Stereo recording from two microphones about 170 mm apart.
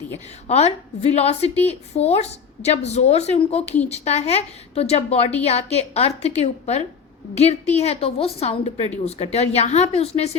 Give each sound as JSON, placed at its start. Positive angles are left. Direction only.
{"t": 0.4, "sound": "a woman's voice", "side_deg": 40}